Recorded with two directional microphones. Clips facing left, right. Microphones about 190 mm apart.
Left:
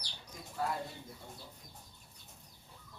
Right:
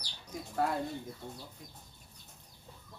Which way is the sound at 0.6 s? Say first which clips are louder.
Right 4 dB; 65° right (ahead or behind).